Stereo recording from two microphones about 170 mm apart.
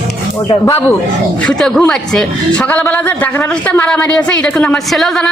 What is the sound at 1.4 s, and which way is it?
A man's voice, 5° left (ahead or behind).